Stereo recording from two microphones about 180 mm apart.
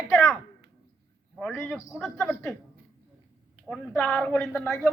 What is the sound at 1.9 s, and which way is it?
Speech, centre (ahead or behind).